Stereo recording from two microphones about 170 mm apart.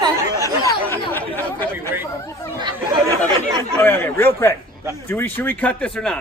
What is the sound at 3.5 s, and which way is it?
Speech, 20° right (ahead or behind).